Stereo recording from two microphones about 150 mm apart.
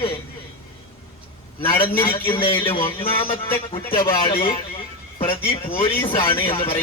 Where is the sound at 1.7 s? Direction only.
15° left (ahead or behind).